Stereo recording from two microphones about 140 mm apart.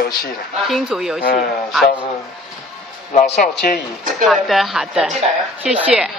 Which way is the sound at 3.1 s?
75° left (ahead or behind).